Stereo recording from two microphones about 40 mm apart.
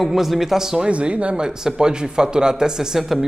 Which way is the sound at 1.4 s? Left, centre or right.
Centre.